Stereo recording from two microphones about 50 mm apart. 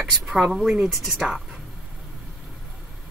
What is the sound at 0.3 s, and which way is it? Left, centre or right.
Speech, centre.